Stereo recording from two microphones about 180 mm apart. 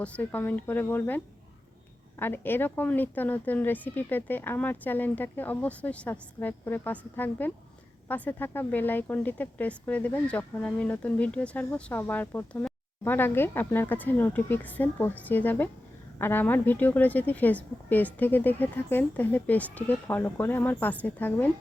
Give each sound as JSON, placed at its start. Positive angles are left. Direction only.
{"t": 0.0, "sound": "speech", "side_deg": 10}